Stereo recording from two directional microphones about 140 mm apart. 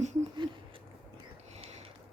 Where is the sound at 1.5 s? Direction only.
50° right (ahead or behind).